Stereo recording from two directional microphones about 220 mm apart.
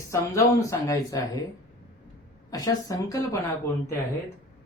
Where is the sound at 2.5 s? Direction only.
15° left (ahead or behind).